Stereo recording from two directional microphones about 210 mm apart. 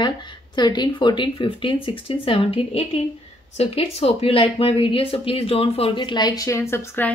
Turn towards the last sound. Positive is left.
turn(degrees=10)  # may be behind; listen again after turning